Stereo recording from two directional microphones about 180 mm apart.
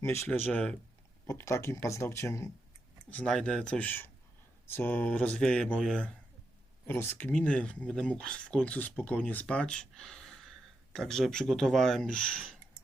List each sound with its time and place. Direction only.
0.0 s speech: 10° left (ahead or behind)
3.1 s speech: 5° left (ahead or behind)